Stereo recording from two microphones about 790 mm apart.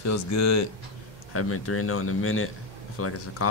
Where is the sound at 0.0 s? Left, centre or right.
Centre.